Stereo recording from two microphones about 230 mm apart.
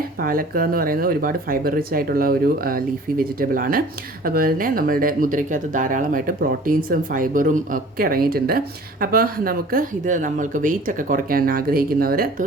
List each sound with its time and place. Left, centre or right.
0.2 s speech: right